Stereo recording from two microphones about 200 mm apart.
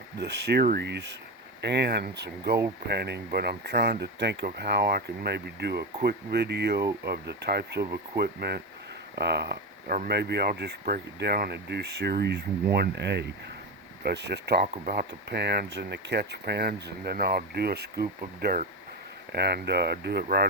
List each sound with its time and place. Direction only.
0.2 s speech: 55° right (ahead or behind)